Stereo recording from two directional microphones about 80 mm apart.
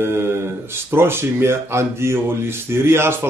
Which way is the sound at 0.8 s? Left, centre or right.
Right.